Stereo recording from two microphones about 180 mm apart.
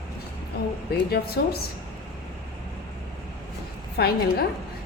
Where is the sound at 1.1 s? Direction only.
60° left (ahead or behind).